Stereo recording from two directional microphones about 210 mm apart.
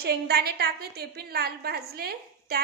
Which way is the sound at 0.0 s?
50° right (ahead or behind).